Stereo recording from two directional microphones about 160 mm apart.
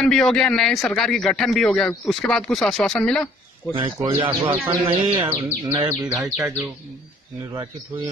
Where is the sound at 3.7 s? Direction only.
25° right (ahead or behind).